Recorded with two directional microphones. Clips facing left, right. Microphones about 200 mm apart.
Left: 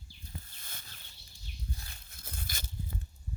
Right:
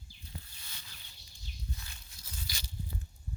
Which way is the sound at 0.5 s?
50° left (ahead or behind).